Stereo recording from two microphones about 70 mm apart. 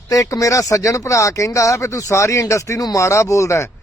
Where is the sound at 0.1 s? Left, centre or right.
Left.